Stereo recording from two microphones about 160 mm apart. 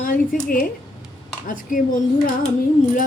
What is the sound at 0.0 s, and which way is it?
Speech, 60° left (ahead or behind).